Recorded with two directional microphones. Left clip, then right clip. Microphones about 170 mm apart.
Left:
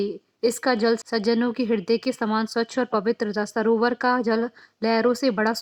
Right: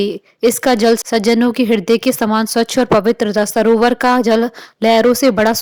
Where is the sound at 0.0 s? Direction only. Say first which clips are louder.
Right 9 dB; 40° right (ahead or behind).